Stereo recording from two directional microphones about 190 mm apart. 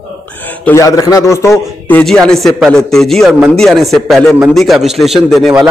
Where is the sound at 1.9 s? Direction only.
5° left (ahead or behind).